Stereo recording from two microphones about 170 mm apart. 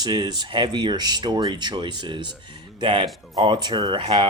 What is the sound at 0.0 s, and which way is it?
Speech, 25° right (ahead or behind).